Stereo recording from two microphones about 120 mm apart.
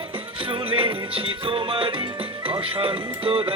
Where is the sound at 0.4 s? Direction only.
45° right (ahead or behind).